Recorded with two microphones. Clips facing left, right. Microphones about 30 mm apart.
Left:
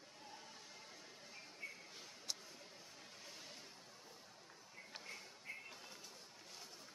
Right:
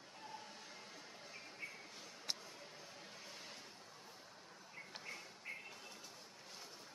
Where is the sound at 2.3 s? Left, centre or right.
Right.